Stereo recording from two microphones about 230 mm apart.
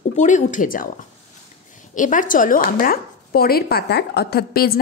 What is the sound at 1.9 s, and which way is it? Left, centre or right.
A woman's voice, left.